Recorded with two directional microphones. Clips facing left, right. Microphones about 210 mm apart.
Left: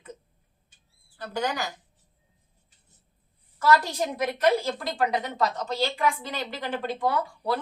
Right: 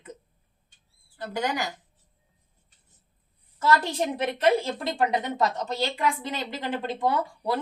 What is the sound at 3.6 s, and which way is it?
A woman's voice, 25° right (ahead or behind).